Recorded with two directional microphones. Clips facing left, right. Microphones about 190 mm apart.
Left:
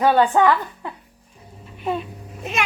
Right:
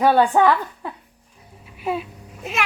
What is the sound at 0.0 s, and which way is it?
Speech, 10° right (ahead or behind).